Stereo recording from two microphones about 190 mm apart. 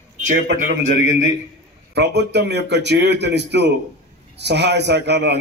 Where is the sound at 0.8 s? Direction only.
70° right (ahead or behind).